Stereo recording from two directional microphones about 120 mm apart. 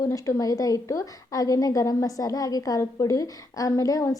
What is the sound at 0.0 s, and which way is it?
A woman's voice, 30° left (ahead or behind).